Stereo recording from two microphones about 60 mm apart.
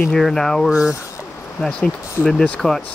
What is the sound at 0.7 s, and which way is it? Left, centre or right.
Speech, centre.